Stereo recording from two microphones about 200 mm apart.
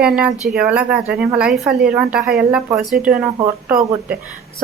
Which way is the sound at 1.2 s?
5° right (ahead or behind).